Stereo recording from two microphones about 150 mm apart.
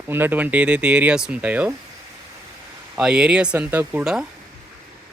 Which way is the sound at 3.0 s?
5° right (ahead or behind).